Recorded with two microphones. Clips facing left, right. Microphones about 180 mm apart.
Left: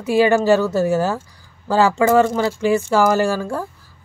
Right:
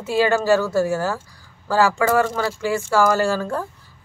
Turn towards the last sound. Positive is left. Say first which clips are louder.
# left 2 dB
turn(degrees=10)  # may be behind; listen again after turning